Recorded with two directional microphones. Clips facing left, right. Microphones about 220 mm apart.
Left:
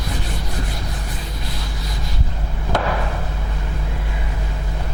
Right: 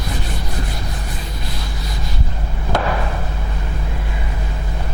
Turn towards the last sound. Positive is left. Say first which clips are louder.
# right 1 dB
turn(degrees=-20)  # may be behind; listen again after turning